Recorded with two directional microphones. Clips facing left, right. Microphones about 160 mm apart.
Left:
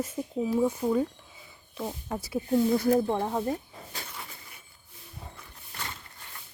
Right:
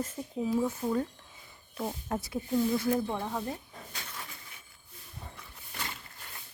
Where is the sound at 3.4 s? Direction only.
35° left (ahead or behind).